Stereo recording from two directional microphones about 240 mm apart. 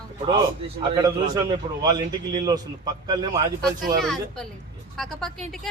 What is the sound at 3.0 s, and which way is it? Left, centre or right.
Speech, centre.